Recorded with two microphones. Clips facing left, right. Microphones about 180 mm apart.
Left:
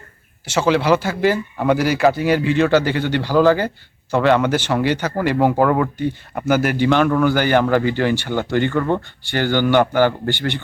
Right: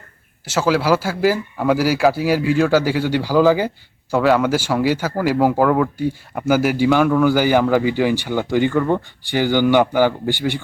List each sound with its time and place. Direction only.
0.4 s a man's voice: 5° right (ahead or behind)